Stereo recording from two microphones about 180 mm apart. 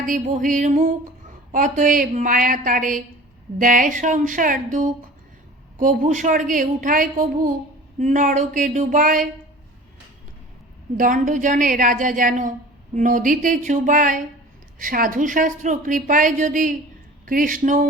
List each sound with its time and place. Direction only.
0.0 s a woman's voice: 45° right (ahead or behind)
10.9 s a woman's voice: 50° right (ahead or behind)